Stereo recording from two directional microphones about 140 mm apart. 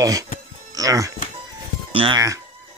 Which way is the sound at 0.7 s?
25° right (ahead or behind).